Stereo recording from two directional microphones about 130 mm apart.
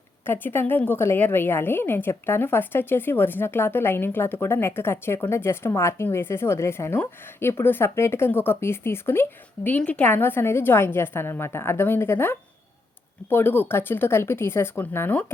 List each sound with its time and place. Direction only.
0.3 s a woman's voice: 15° left (ahead or behind)